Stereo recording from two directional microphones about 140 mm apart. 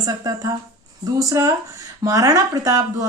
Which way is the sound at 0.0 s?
25° right (ahead or behind).